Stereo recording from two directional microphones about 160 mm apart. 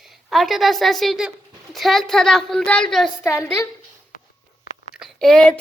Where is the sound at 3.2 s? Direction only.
20° left (ahead or behind).